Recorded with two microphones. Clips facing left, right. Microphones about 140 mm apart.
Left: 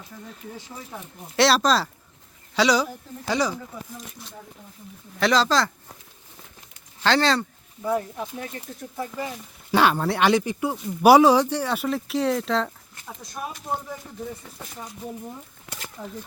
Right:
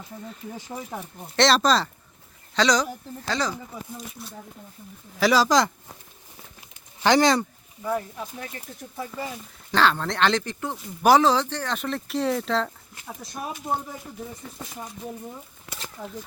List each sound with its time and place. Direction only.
0.7 s speech: 40° right (ahead or behind)
1.4 s speech: 5° left (ahead or behind)
4.1 s speech: centre (ahead or behind)
7.0 s speech: 15° right (ahead or behind)
7.9 s speech: 5° left (ahead or behind)
9.7 s speech: 10° left (ahead or behind)